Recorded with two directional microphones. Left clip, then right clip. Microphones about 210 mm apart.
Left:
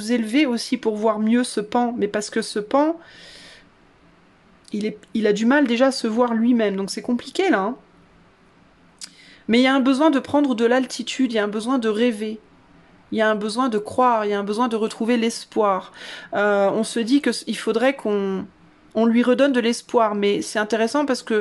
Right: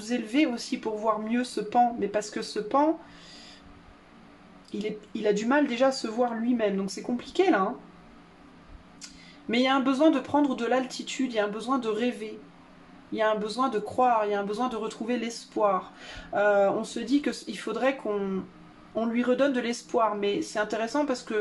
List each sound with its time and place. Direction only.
0.0 s speech: 50° left (ahead or behind)
4.6 s speech: 50° left (ahead or behind)
9.0 s speech: 50° left (ahead or behind)